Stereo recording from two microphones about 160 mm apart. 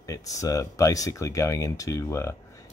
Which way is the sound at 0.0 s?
20° left (ahead or behind).